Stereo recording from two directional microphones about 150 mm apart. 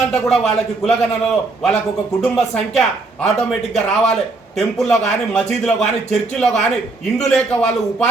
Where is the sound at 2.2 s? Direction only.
5° left (ahead or behind).